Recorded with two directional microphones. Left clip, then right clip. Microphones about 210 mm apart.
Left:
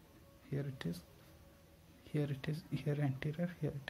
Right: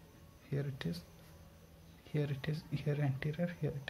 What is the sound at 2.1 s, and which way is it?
Speech, 15° left (ahead or behind).